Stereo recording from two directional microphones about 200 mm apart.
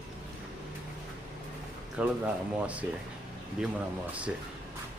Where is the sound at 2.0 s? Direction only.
5° right (ahead or behind).